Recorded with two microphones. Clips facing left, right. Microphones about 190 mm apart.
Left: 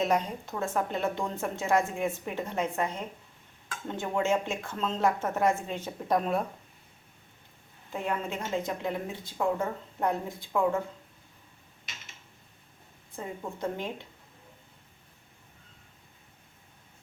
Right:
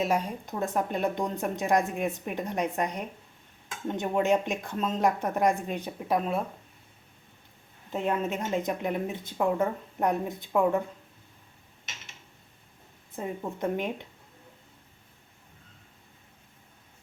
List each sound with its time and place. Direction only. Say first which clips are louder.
0.0 s a woman's voice: even; 10° right (ahead or behind)
6.1 s speech: left 1 dB; centre (ahead or behind)
7.9 s speech: right 4 dB; 20° right (ahead or behind)
13.1 s speech: right 3 dB; 20° right (ahead or behind)